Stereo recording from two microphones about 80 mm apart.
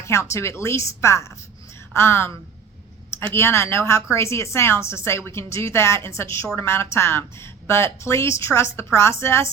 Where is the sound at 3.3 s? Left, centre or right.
Left.